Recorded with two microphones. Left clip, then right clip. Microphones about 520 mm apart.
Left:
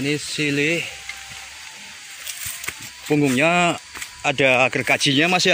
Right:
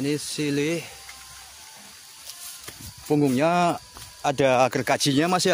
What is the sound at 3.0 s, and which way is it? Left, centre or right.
Speech, right.